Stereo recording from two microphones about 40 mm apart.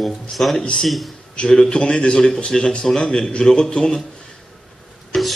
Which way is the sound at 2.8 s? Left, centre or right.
Centre.